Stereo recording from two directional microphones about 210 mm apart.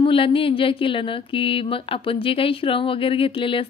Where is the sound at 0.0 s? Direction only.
25° left (ahead or behind).